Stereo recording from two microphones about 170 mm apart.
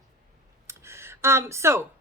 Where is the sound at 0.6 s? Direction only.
15° right (ahead or behind).